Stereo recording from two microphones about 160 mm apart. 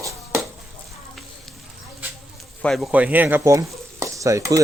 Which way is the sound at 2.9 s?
10° right (ahead or behind).